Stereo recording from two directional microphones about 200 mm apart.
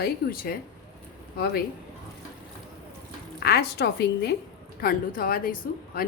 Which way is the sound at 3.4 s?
50° left (ahead or behind).